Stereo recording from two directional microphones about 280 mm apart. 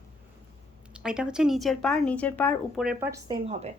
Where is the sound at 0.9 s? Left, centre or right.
Centre.